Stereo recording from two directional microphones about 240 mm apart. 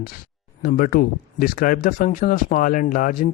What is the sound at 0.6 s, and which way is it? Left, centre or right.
Speech, left.